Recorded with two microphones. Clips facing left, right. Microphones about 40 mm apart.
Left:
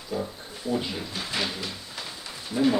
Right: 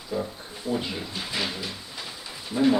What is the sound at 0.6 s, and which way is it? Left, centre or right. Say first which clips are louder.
Speech: even; centre.